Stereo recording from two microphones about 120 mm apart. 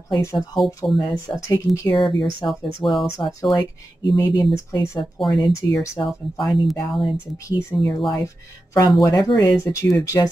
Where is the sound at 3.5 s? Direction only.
40° left (ahead or behind).